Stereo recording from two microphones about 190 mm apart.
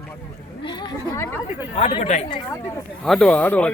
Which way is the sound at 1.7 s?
35° left (ahead or behind).